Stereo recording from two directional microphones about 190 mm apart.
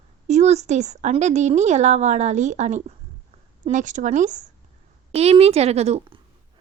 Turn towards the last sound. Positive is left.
turn(degrees=-35)  # may be behind; listen again after turning